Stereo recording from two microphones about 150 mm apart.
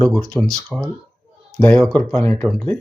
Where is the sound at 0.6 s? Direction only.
Centre (ahead or behind).